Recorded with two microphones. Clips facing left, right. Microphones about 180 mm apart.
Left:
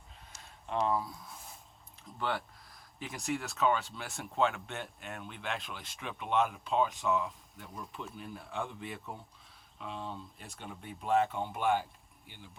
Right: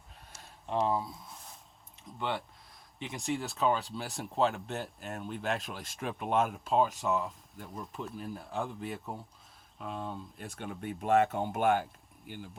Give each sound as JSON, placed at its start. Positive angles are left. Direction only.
{"t": 0.8, "sound": "speech", "side_deg": -30}
{"t": 2.0, "sound": "speech", "side_deg": 0}
{"t": 4.4, "sound": "speech", "side_deg": -35}
{"t": 6.7, "sound": "speech", "side_deg": 0}
{"t": 9.8, "sound": "speech", "side_deg": -45}